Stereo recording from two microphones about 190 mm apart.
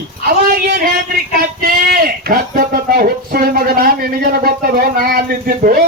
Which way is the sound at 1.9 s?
50° right (ahead or behind).